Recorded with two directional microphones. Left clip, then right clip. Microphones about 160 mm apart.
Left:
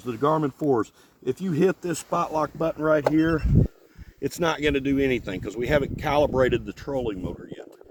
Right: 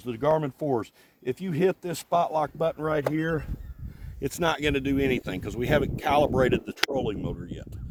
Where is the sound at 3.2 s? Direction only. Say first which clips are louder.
Left 6 dB; 90° right.